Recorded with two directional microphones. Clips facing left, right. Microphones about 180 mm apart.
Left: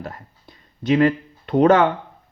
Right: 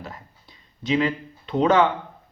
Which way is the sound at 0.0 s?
55° left (ahead or behind).